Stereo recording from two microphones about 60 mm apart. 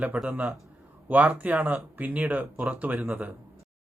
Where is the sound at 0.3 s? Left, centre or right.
Right.